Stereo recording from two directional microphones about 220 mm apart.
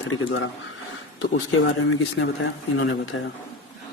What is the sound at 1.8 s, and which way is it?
Speech, 60° left (ahead or behind).